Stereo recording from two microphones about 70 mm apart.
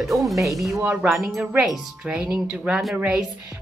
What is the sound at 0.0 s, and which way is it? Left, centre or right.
A woman's voice, centre.